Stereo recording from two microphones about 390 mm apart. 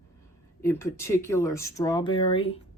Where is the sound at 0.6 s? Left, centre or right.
Centre.